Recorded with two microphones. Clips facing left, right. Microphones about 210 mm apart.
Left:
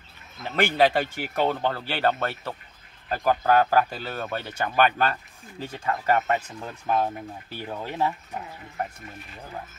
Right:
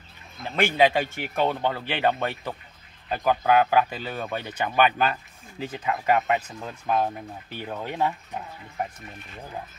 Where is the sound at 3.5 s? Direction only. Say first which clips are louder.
Even; 10° right (ahead or behind).